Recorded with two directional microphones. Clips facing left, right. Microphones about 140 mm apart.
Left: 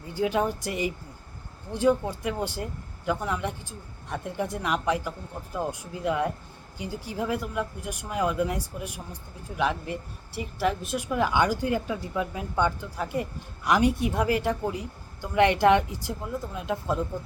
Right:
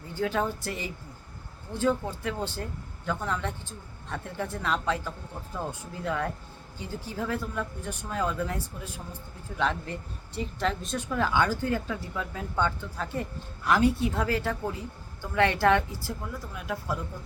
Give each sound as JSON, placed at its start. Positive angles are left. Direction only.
{"t": 0.1, "sound": "speech", "side_deg": 15}